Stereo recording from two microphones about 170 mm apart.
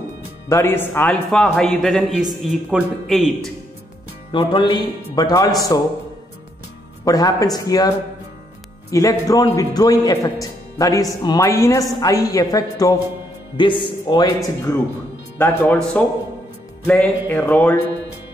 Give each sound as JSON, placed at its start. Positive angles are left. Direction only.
{"t": 0.5, "sound": "a man's voice", "side_deg": 15}
{"t": 4.3, "sound": "a man's voice", "side_deg": 30}
{"t": 7.1, "sound": "a man's voice", "side_deg": 20}
{"t": 8.9, "sound": "a man's voice", "side_deg": 20}
{"t": 15.3, "sound": "music", "side_deg": 10}